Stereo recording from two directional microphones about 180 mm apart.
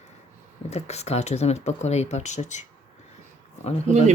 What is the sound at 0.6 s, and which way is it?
Speech, 35° left (ahead or behind).